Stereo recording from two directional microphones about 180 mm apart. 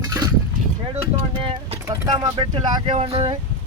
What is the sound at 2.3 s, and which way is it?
Speech, 25° right (ahead or behind).